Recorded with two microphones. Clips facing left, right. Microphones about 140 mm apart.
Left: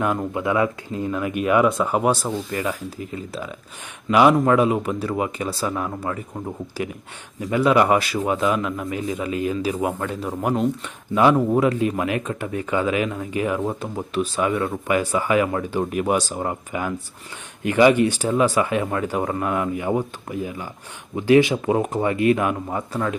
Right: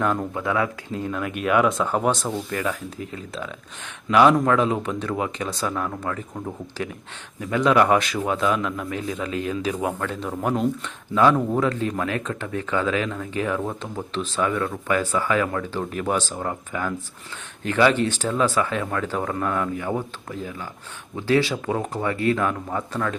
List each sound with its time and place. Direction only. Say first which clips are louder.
0.0 s speech: left 1 dB; 10° left (ahead or behind)